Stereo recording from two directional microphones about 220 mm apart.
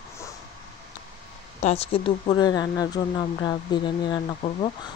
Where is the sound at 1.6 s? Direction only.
25° left (ahead or behind).